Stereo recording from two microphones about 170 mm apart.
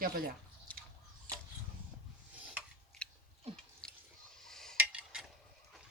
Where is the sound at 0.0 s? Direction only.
60° right (ahead or behind).